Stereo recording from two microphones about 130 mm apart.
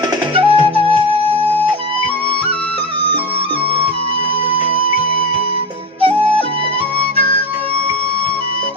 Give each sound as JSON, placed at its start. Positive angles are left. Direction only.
{"t": 0.3, "sound": "music", "side_deg": -40}